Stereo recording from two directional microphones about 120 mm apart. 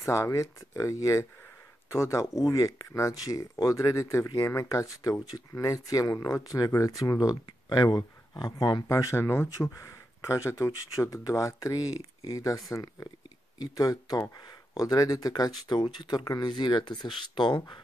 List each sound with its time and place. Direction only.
0.0 s speech: 25° left (ahead or behind); by 17.6 s 40° left (ahead or behind)